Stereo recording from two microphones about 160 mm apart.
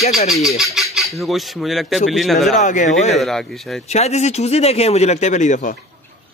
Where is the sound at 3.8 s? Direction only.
45° left (ahead or behind).